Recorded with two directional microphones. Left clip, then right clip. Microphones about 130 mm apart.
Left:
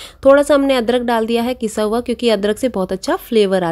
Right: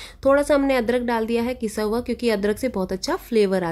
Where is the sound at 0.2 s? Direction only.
25° left (ahead or behind).